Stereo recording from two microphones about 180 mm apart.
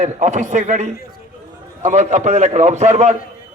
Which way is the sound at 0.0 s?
40° right (ahead or behind).